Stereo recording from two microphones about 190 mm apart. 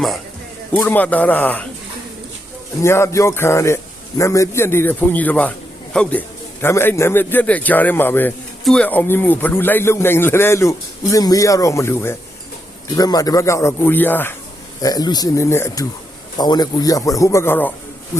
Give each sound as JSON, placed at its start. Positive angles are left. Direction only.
{"t": 0.7, "sound": "a man's voice", "side_deg": 10}
{"t": 2.8, "sound": "a man's voice", "side_deg": 15}